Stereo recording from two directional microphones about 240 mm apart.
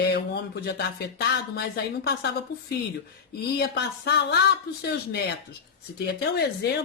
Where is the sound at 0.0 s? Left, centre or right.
Left.